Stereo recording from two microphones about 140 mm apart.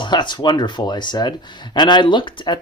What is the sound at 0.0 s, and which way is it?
Speech, 35° left (ahead or behind).